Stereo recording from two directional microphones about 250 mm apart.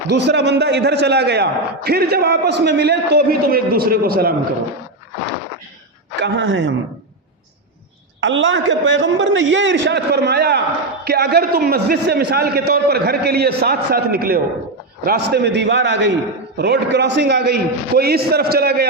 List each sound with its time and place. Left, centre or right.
0.1 s a man's voice: right
6.1 s a man's voice: right
8.2 s a man's voice: right